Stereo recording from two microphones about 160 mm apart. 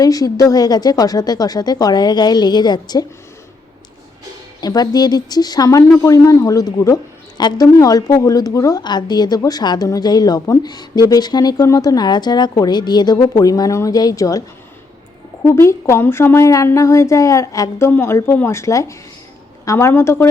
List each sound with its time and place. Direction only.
0.0 s speech: 25° left (ahead or behind)
4.6 s speech: 25° left (ahead or behind)
15.4 s speech: 15° left (ahead or behind)